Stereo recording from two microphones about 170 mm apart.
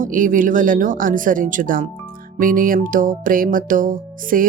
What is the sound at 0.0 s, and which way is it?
Music, 50° right (ahead or behind).